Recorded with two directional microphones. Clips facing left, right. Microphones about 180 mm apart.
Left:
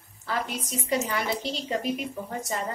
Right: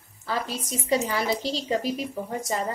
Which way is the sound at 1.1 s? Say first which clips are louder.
Right 3 dB; 35° right (ahead or behind).